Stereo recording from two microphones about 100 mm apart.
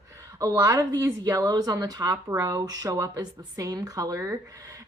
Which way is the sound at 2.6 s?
40° right (ahead or behind).